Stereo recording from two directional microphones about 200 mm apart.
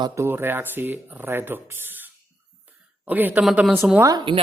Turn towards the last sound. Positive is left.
turn(degrees=-20)  # may be behind; listen again after turning